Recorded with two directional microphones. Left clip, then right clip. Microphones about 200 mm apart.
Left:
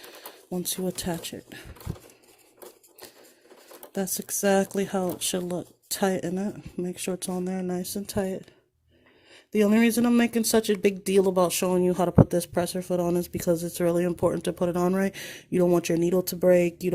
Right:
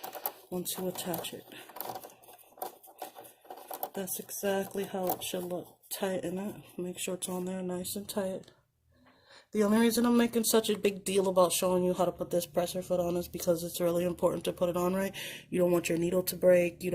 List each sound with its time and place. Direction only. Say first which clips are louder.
1.0 s speech: left 4 dB; 50° left (ahead or behind)
3.9 s speech: left 8 dB; 50° left (ahead or behind)
9.5 s speech: left 5 dB; 50° left (ahead or behind); by 15.0 s 35° left (ahead or behind)
15.0 s speech: left 5 dB; 50° left (ahead or behind)